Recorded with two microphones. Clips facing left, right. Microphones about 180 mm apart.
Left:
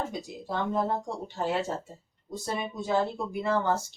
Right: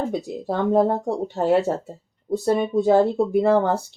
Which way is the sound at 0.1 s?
65° right (ahead or behind).